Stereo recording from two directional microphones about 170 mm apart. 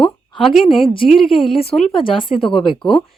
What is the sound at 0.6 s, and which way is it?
Speech, 30° left (ahead or behind).